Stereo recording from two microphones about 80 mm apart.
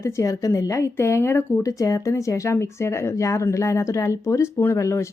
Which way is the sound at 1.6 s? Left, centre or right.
Left.